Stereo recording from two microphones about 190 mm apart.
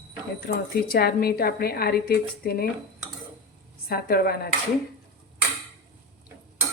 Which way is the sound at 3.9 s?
55° left (ahead or behind).